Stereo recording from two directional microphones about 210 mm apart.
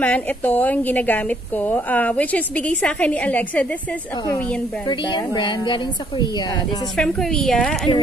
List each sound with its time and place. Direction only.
0.0 s a woman's voice: 5° left (ahead or behind)
4.8 s a woman's voice: 20° left (ahead or behind)
7.0 s a woman's voice: 5° left (ahead or behind)